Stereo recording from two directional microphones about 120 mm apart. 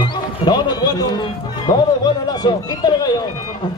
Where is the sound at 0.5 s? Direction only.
35° left (ahead or behind).